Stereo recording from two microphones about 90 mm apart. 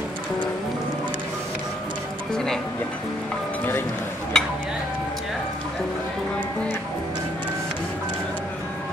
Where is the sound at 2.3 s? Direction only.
5° left (ahead or behind).